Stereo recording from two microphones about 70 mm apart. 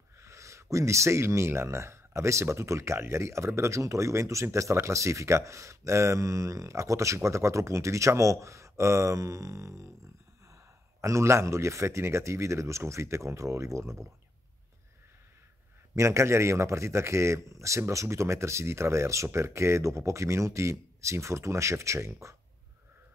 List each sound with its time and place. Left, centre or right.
0.2 s speech: right
15.9 s speech: right